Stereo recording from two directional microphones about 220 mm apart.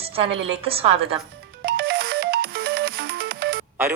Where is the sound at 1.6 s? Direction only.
45° right (ahead or behind).